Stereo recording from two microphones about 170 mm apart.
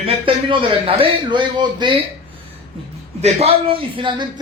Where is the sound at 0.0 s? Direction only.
35° right (ahead or behind).